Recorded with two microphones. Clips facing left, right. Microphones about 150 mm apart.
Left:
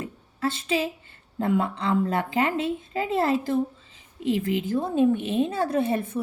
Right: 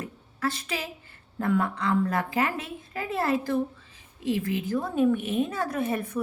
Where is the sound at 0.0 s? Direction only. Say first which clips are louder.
Left 2 dB; 25° left (ahead or behind).